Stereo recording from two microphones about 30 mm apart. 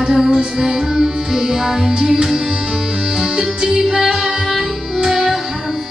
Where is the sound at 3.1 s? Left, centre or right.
Right.